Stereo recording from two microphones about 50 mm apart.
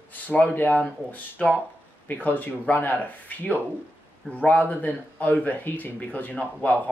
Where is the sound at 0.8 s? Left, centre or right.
Left.